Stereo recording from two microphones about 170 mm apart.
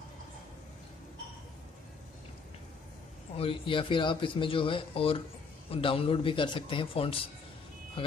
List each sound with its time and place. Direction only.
3.3 s speech: 30° left (ahead or behind)